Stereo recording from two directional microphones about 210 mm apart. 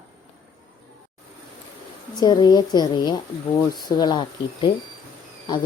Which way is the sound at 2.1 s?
20° left (ahead or behind).